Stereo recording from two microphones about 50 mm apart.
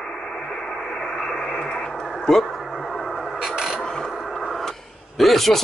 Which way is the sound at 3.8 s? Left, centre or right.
Centre.